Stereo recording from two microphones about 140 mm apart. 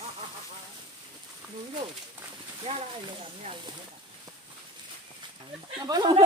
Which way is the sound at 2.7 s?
50° right (ahead or behind).